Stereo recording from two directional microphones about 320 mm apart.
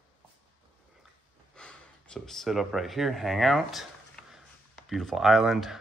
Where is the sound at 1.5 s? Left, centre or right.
Centre.